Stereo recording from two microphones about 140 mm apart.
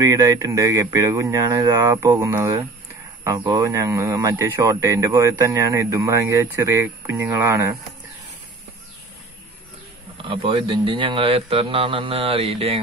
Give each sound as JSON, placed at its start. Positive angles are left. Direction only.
{"t": 0.0, "sound": "speech", "side_deg": -20}
{"t": 3.3, "sound": "speech", "side_deg": -35}
{"t": 3.7, "sound": "speech", "side_deg": -20}
{"t": 10.1, "sound": "speech", "side_deg": -40}